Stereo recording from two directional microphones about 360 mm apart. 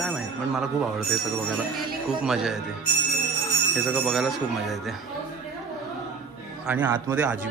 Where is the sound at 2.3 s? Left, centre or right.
Centre.